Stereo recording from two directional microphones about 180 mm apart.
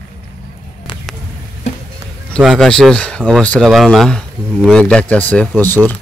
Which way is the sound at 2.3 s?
Centre (ahead or behind).